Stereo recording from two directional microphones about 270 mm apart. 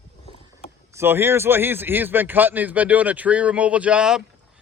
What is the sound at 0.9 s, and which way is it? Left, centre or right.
A man's voice, centre.